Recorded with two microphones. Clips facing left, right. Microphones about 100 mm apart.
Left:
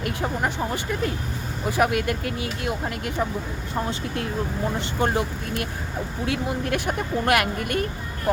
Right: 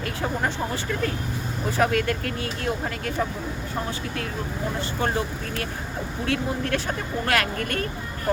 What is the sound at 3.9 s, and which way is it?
Speech, 30° left (ahead or behind).